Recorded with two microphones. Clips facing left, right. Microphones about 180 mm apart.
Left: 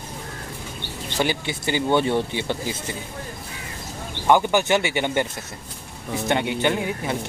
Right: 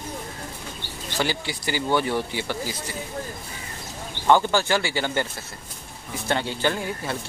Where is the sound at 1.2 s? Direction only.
20° left (ahead or behind).